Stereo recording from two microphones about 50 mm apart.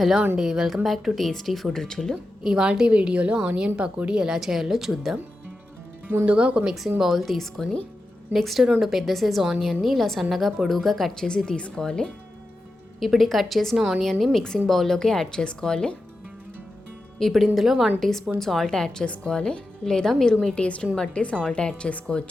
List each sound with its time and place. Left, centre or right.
0.3 s speech: centre
0.9 s a woman's voice: centre
2.4 s a woman's voice: centre
6.2 s a woman's voice: right
7.0 s a woman's voice: centre
11.3 s speech: centre
13.0 s a woman's voice: centre
13.7 s speech: centre
14.0 s a woman's voice: centre
17.2 s a woman's voice: centre
19.0 s a woman's voice: left
20.6 s a woman's voice: left